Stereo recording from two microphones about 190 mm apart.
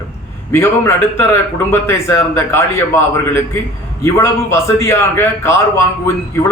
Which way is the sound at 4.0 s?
15° left (ahead or behind).